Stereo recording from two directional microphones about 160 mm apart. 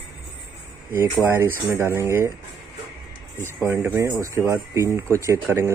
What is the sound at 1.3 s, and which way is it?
Speech, 15° right (ahead or behind).